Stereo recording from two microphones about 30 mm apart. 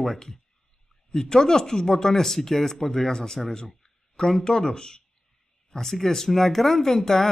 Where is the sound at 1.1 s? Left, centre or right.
Centre.